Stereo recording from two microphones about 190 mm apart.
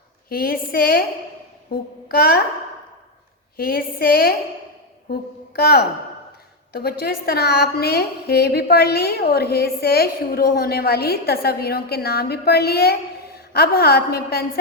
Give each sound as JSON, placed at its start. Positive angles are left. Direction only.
{"t": 0.3, "sound": "a woman's voice", "side_deg": 50}
{"t": 3.6, "sound": "a woman's voice", "side_deg": 50}
{"t": 5.5, "sound": "a woman's voice", "side_deg": 55}